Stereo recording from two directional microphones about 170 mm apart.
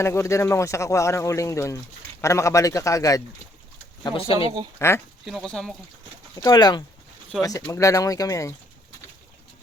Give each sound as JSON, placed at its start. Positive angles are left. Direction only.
{"t": 0.0, "sound": "speech", "side_deg": 15}
{"t": 4.0, "sound": "speech", "side_deg": 30}
{"t": 4.8, "sound": "speech", "side_deg": 15}
{"t": 5.2, "sound": "speech", "side_deg": 0}
{"t": 6.3, "sound": "speech", "side_deg": 20}